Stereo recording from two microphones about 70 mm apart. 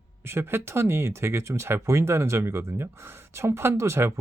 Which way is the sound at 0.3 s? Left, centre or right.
Right.